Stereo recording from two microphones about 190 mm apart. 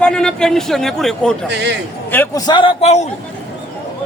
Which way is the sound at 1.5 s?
60° right (ahead or behind).